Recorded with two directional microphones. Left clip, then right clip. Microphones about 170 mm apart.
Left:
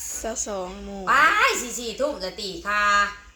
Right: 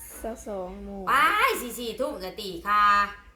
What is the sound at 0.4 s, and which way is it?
Speech, 20° left (ahead or behind).